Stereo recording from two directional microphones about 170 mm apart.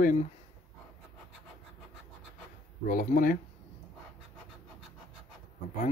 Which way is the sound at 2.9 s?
55° left (ahead or behind).